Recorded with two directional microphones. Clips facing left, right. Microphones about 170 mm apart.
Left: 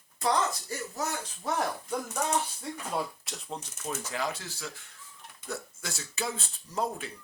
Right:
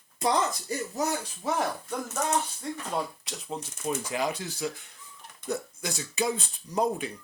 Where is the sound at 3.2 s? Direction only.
Centre (ahead or behind).